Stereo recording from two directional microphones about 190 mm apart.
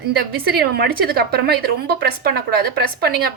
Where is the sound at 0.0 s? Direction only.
55° right (ahead or behind).